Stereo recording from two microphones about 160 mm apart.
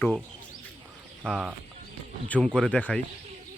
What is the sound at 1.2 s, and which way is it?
Speech, centre (ahead or behind).